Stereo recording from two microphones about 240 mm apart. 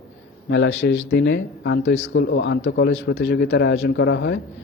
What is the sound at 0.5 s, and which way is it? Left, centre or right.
A man's voice, left.